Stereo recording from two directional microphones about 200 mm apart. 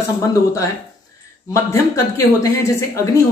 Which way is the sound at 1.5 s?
15° left (ahead or behind).